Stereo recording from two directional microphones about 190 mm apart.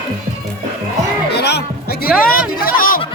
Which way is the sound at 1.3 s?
60° left (ahead or behind).